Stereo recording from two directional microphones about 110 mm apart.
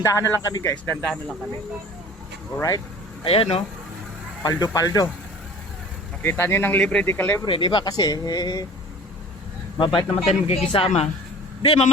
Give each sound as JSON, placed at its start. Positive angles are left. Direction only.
{"t": 0.0, "sound": "speech", "side_deg": 25}
{"t": 1.0, "sound": "speech", "side_deg": 0}
{"t": 2.6, "sound": "speech", "side_deg": 30}
{"t": 3.2, "sound": "speech", "side_deg": 60}
{"t": 4.4, "sound": "speech", "side_deg": 35}
{"t": 6.2, "sound": "speech", "side_deg": 20}
{"t": 7.4, "sound": "speech", "side_deg": 45}
{"t": 9.7, "sound": "speech", "side_deg": 50}
{"t": 11.6, "sound": "a man's voice", "side_deg": 45}